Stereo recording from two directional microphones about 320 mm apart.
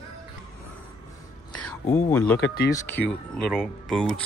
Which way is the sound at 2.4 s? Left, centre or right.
Left.